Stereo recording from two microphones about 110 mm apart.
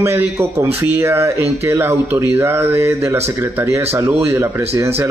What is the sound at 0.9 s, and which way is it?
Speech, 20° right (ahead or behind).